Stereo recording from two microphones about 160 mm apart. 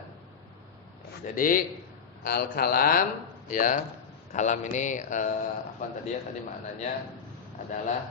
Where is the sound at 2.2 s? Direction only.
70° left (ahead or behind).